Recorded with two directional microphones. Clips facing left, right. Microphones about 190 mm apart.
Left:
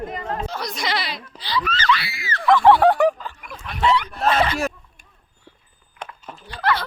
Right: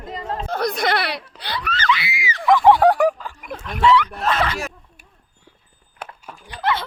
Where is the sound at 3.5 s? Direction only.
45° right (ahead or behind).